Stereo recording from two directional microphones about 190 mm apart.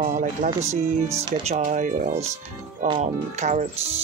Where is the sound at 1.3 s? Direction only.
35° right (ahead or behind).